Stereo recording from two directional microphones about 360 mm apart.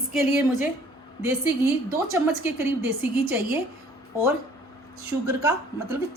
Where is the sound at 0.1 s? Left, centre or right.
Centre.